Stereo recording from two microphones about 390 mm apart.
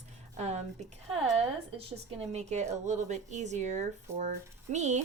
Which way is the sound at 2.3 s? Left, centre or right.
Centre.